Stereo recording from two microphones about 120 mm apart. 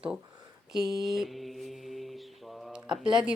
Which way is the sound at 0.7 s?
Centre (ahead or behind).